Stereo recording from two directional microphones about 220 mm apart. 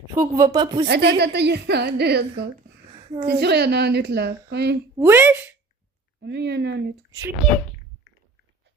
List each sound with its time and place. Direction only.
0.1 s speech: 15° right (ahead or behind)
0.9 s a woman's voice: 50° right (ahead or behind)
4.9 s speech: 10° right (ahead or behind)
6.2 s a woman's voice: 50° right (ahead or behind)